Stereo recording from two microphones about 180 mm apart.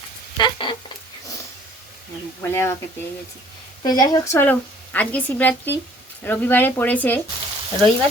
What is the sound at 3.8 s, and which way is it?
Speech, 20° left (ahead or behind).